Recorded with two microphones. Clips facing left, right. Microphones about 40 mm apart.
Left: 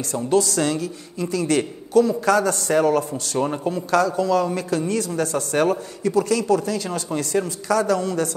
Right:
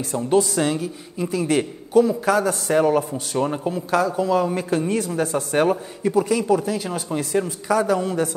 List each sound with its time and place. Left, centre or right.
0.1 s a man's voice: centre
3.3 s a man's voice: centre